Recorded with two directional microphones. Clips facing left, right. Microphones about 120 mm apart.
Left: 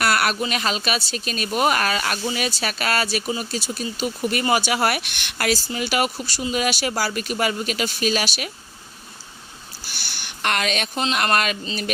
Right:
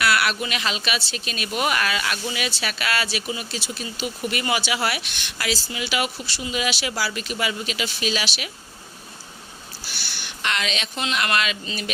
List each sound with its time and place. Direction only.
0.0 s speech: 45° left (ahead or behind)
9.8 s a sound: 50° left (ahead or behind)
11.0 s speech: 40° left (ahead or behind)